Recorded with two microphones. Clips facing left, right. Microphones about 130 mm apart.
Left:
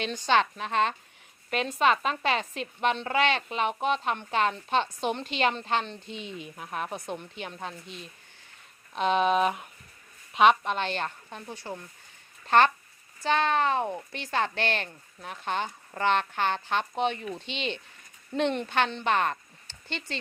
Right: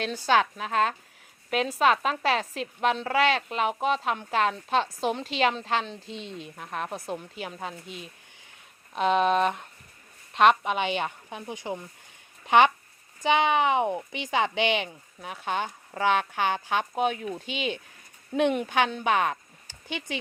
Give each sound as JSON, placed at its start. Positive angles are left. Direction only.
{"t": 0.0, "sound": "a woman's voice", "side_deg": -5}